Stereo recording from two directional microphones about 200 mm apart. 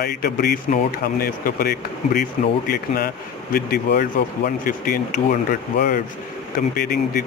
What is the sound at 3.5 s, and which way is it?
Speech, 50° left (ahead or behind).